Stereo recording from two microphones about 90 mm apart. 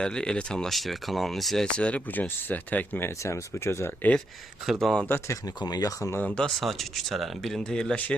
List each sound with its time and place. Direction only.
0.0 s speech: 10° left (ahead or behind)
3.2 s speech: 30° left (ahead or behind)
4.6 s speech: centre (ahead or behind)
5.0 s speech: 25° left (ahead or behind)
5.5 s speech: 50° left (ahead or behind)
6.1 s speech: 15° left (ahead or behind)